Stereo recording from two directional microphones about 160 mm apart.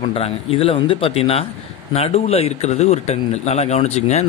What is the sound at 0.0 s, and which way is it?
A man's voice, 35° left (ahead or behind).